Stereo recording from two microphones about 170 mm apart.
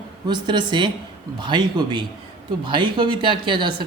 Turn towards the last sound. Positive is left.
turn(degrees=-30)  # may be behind; listen again after turning